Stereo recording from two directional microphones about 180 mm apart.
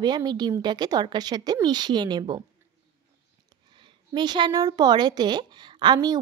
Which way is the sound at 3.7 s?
25° right (ahead or behind).